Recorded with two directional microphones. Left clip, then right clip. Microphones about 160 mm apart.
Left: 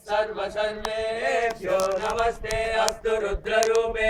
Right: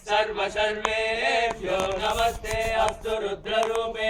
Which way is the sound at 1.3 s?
15° left (ahead or behind).